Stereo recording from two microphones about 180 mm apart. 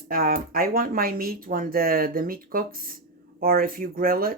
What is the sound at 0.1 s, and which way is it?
Speech, 55° right (ahead or behind).